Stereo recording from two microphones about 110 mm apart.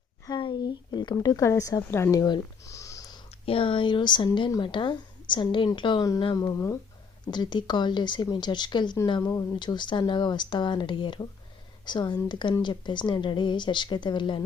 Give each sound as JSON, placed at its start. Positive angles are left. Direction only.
{"t": 0.3, "sound": "speech", "side_deg": 40}
{"t": 3.4, "sound": "speech", "side_deg": 55}
{"t": 6.0, "sound": "speech", "side_deg": 35}
{"t": 7.3, "sound": "speech", "side_deg": 40}